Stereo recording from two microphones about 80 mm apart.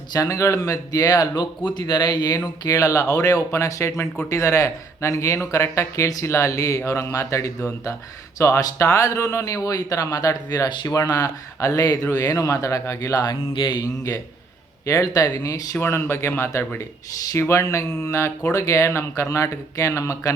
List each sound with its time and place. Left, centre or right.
0.1 s speech: left
1.7 s speech: left
2.6 s speech: left
13.5 s speech: left
14.8 s speech: left
15.8 s speech: left